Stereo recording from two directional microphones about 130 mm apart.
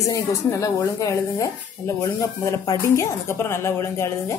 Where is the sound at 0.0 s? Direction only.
25° left (ahead or behind).